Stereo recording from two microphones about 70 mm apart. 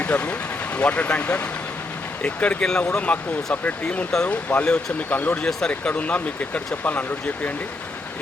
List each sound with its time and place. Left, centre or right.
0.0 s speech: centre
5.5 s speech: centre
5.9 s speech: left